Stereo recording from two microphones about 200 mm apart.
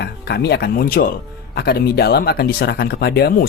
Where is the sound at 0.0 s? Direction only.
55° left (ahead or behind).